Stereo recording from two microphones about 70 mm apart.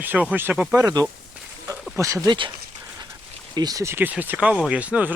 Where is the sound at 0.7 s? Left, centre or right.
Right.